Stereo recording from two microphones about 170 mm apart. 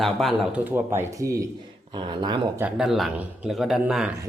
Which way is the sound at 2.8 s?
Centre (ahead or behind).